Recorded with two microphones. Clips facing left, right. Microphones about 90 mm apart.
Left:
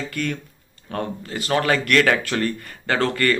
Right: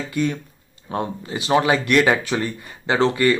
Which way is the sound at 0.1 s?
15° right (ahead or behind).